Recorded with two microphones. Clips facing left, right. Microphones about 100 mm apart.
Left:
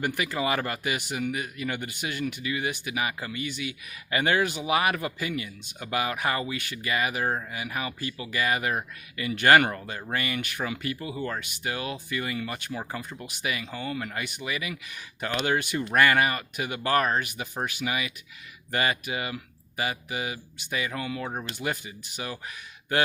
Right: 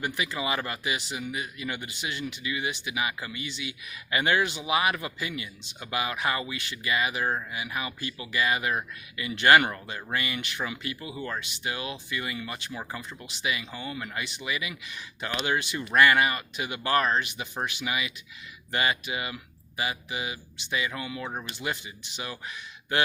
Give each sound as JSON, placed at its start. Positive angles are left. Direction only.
{"t": 0.0, "sound": "a man's voice", "side_deg": 50}
{"t": 13.7, "sound": "speech", "side_deg": -20}
{"t": 14.0, "sound": "a man's voice", "side_deg": 45}